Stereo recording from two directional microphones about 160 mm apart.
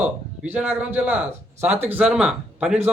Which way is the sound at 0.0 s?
10° right (ahead or behind).